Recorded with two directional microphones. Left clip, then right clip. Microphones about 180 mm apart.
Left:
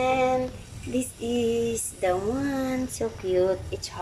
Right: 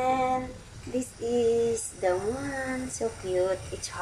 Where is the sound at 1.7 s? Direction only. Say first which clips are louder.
Left 1 dB; centre (ahead or behind).